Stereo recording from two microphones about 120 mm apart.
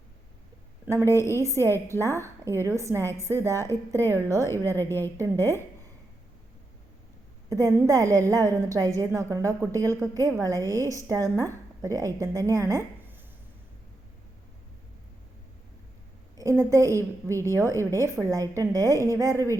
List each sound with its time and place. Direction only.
0.9 s a woman's voice: 25° right (ahead or behind)
1.6 s speech: 20° left (ahead or behind)
2.0 s a woman's voice: 25° right (ahead or behind)
3.6 s speech: 20° left (ahead or behind)
4.1 s a woman's voice: 25° right (ahead or behind)
4.7 s speech: 20° left (ahead or behind)
7.9 s a woman's voice: 30° right (ahead or behind)
16.4 s a woman's voice: 25° right (ahead or behind)